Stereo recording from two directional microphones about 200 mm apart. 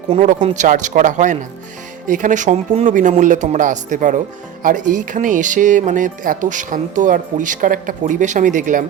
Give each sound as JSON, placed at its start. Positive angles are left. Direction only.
{"t": 0.1, "sound": "speech", "side_deg": -35}